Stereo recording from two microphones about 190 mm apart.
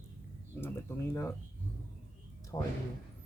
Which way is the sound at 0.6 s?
10° left (ahead or behind).